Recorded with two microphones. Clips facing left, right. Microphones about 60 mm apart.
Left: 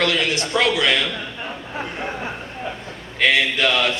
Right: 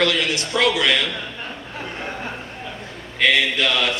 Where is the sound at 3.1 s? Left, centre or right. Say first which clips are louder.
Even; centre.